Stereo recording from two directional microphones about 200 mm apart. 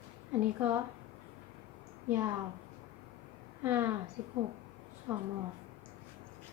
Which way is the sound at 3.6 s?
10° right (ahead or behind).